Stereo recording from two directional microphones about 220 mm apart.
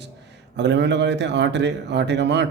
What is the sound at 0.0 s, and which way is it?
A man's voice, 50° right (ahead or behind).